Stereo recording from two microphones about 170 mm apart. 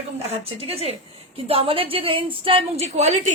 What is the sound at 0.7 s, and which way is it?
A woman's voice, 35° right (ahead or behind).